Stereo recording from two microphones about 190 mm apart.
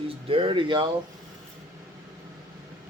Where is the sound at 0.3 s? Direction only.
30° right (ahead or behind).